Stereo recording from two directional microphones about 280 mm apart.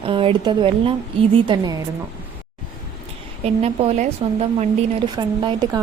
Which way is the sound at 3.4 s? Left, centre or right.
Right.